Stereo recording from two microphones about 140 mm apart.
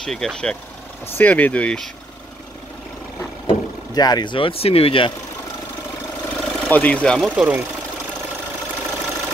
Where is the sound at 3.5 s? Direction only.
30° left (ahead or behind).